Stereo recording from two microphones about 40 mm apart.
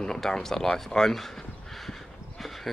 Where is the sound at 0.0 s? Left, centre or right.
Centre.